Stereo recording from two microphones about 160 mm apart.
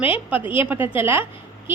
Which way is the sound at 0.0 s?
10° right (ahead or behind).